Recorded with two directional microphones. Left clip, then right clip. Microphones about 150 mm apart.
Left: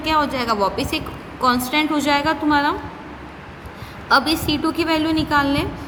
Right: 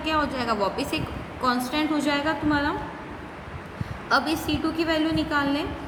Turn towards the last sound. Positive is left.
turn(degrees=70)  # may be behind; listen again after turning